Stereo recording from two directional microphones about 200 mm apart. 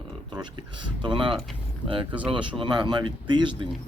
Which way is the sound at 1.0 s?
25° right (ahead or behind).